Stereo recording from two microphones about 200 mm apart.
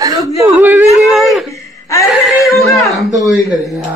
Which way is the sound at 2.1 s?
5° right (ahead or behind).